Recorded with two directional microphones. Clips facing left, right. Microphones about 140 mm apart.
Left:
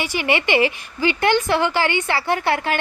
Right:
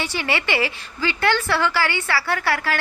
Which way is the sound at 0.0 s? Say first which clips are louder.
Left 3 dB; 15° left (ahead or behind).